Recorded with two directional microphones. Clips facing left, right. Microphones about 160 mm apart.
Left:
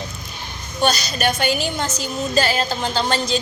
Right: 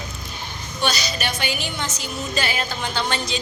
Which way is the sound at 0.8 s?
50° left (ahead or behind).